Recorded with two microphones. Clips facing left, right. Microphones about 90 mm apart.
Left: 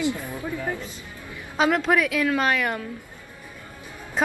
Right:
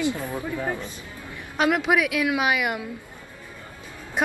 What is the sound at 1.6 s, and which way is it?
A woman's voice, 5° right (ahead or behind).